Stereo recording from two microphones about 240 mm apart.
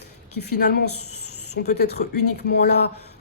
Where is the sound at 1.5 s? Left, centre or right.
Left.